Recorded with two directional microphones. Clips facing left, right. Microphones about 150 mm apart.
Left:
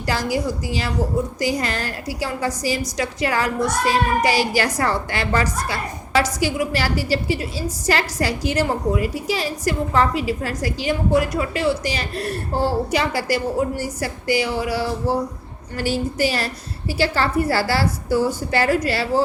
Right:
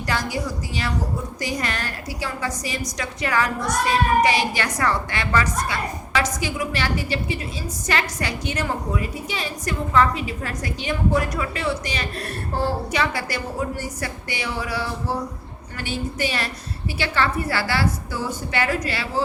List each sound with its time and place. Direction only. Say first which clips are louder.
0.0 s a woman's voice: left 4 dB; 30° left (ahead or behind)